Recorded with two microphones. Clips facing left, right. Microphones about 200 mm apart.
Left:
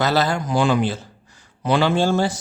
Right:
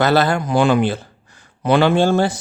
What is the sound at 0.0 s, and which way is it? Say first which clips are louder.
Speech: right 4 dB; 55° right (ahead or behind).